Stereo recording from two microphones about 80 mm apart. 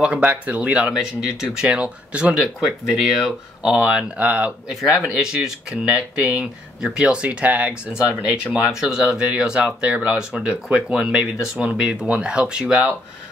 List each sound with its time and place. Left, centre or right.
0.0 s speech: centre